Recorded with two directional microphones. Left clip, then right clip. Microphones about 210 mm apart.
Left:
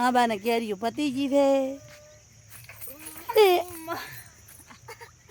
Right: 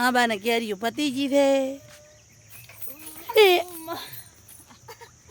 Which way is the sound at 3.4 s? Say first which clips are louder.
Right 2 dB; centre (ahead or behind).